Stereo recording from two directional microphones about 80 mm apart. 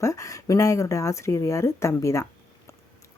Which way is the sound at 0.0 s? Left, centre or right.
Left.